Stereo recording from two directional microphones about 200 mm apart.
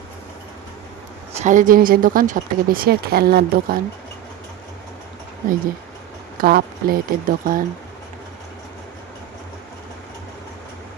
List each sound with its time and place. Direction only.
1.4 s speech: 40° right (ahead or behind)
6.4 s speech: 45° right (ahead or behind)